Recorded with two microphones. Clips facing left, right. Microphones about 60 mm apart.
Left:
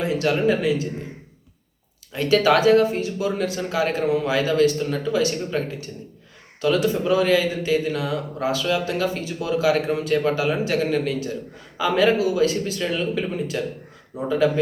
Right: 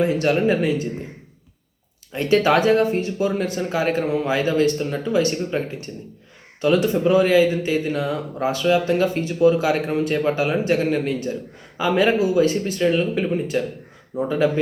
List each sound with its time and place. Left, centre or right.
0.0 s speech: right
2.1 s speech: right